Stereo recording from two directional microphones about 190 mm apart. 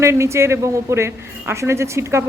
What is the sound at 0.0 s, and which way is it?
A woman's voice, 15° right (ahead or behind).